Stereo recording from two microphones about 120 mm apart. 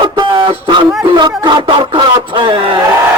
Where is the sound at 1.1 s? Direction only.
40° right (ahead or behind).